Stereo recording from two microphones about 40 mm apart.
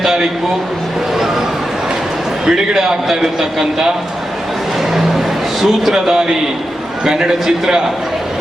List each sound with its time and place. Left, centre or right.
2.5 s a man's voice: centre
5.5 s a man's voice: centre